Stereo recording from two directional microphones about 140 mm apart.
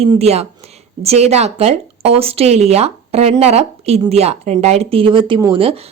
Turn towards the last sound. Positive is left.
turn(degrees=-40)  # may be behind; listen again after turning